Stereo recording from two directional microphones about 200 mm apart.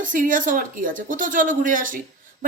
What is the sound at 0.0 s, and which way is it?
A woman's voice, 40° right (ahead or behind).